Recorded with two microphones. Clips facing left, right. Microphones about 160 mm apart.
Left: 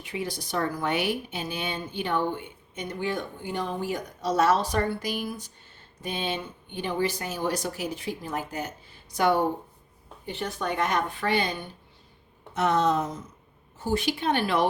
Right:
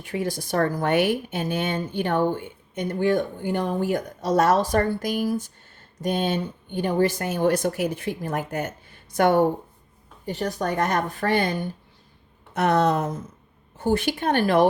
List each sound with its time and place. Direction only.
0.0 s a woman's voice: 50° right (ahead or behind)
12.5 s a woman's voice: 60° right (ahead or behind)